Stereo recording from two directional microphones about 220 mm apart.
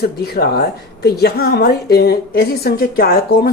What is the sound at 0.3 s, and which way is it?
A woman's voice, 45° left (ahead or behind).